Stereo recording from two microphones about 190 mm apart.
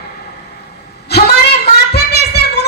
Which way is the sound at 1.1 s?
60° left (ahead or behind).